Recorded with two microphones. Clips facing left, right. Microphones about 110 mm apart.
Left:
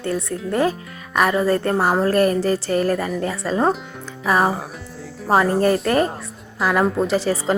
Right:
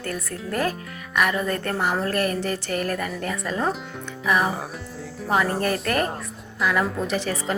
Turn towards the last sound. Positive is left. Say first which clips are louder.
# left 6 dB
turn(degrees=35)  # may be behind; listen again after turning